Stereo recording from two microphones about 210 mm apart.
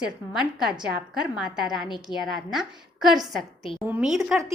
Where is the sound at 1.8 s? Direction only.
20° left (ahead or behind).